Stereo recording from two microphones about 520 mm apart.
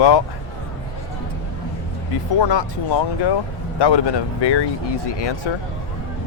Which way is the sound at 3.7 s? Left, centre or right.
Left.